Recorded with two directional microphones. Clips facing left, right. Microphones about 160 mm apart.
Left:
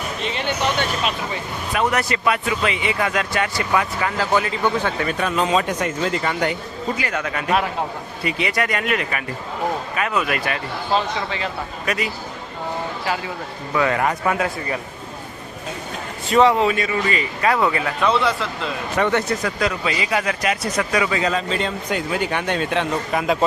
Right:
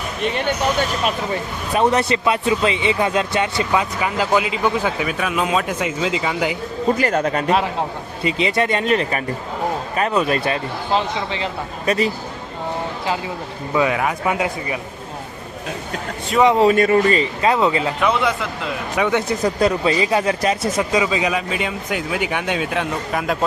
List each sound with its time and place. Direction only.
0.3 s speech: 55° right (ahead or behind)
1.7 s speech: 25° right (ahead or behind); by 6.5 s 10° right (ahead or behind)
6.8 s speech: 40° right (ahead or behind)
13.9 s speech: 5° right (ahead or behind)
14.3 s speech: 15° right (ahead or behind)
16.6 s speech: 45° right (ahead or behind)
17.1 s speech: 25° right (ahead or behind); by 19.2 s 10° right (ahead or behind)
19.4 s speech: 30° right (ahead or behind); by 23.4 s centre (ahead or behind)